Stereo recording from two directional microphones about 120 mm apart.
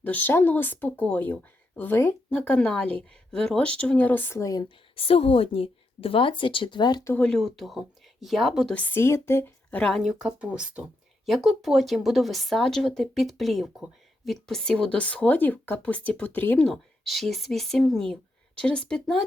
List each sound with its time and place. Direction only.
0.0 s speech: 15° left (ahead or behind)
4.9 s a woman's voice: 55° left (ahead or behind)
7.0 s speech: 15° left (ahead or behind)
8.7 s speech: 15° left (ahead or behind)
9.7 s speech: 5° left (ahead or behind)
16.6 s speech: 5° left (ahead or behind)